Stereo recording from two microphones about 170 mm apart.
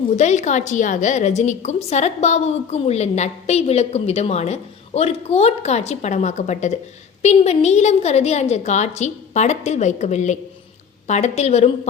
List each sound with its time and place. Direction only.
0.2 s a woman's voice: 45° left (ahead or behind)